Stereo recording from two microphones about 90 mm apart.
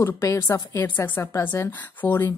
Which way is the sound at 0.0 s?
30° left (ahead or behind).